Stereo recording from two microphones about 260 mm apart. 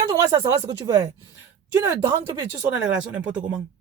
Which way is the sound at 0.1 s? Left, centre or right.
Centre.